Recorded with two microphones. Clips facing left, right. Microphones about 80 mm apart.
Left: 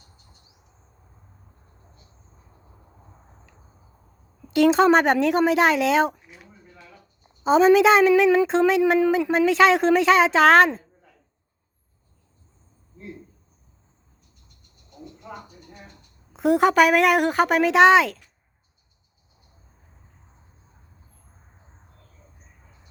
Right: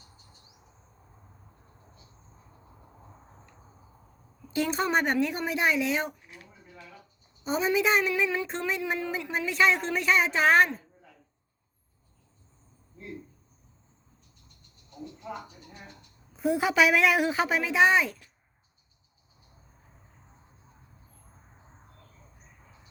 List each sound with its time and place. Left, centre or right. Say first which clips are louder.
4.5 s a woman's voice: left 11 dB; left
7.4 s a woman's voice: left 11 dB; left
16.3 s a woman's voice: left 8 dB; left